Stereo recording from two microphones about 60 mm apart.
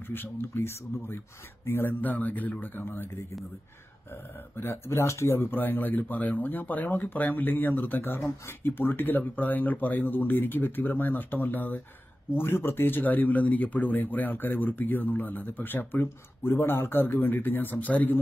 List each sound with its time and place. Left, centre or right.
0.1 s speech: left
4.6 s speech: left